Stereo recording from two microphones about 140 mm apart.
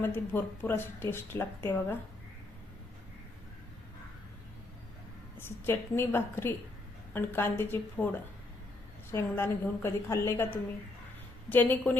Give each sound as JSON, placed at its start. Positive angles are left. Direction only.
{"t": 0.0, "sound": "speech", "side_deg": 15}
{"t": 5.4, "sound": "speech", "side_deg": 15}
{"t": 9.1, "sound": "speech", "side_deg": 15}
{"t": 11.5, "sound": "speech", "side_deg": 10}